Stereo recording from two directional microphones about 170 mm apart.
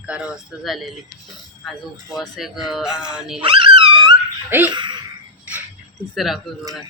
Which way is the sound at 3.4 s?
30° right (ahead or behind).